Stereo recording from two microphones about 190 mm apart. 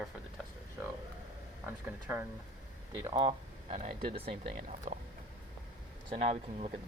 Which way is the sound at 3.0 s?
25° right (ahead or behind).